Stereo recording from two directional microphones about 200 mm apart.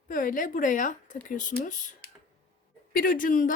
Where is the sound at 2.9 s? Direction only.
45° left (ahead or behind).